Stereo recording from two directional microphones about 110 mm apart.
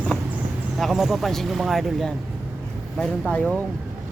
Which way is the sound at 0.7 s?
Centre (ahead or behind).